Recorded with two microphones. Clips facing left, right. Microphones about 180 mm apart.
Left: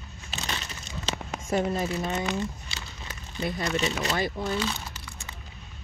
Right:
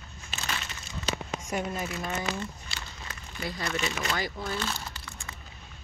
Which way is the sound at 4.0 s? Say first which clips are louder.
Left 4 dB; 25° left (ahead or behind).